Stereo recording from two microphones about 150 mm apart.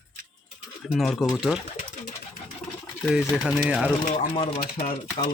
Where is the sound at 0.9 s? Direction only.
Centre (ahead or behind).